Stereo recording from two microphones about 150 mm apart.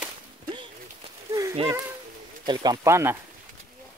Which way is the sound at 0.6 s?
30° right (ahead or behind).